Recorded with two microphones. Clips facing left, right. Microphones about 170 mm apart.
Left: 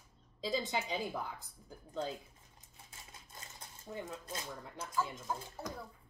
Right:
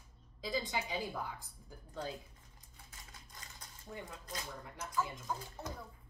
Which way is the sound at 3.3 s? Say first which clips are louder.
Left 4 dB; 25° left (ahead or behind).